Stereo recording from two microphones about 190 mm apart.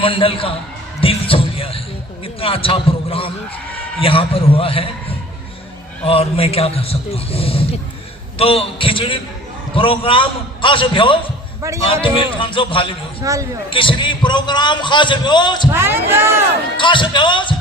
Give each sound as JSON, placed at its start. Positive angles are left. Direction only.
{"t": 0.0, "sound": "a man's voice", "side_deg": 30}
{"t": 6.1, "sound": "a man's voice", "side_deg": 30}
{"t": 13.2, "sound": "speech", "side_deg": -15}
{"t": 13.7, "sound": "a man's voice", "side_deg": 25}
{"t": 15.7, "sound": "speech", "side_deg": -10}
{"t": 16.7, "sound": "a man's voice", "side_deg": 25}